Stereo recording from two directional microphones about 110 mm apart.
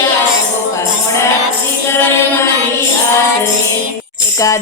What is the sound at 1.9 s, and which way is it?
Speech, 20° left (ahead or behind).